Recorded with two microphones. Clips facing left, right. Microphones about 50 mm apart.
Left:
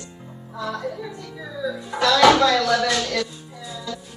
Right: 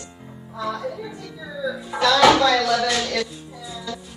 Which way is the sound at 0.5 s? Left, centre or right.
Centre.